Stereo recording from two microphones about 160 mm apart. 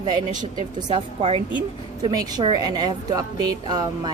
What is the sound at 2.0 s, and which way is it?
A woman's voice, 25° right (ahead or behind).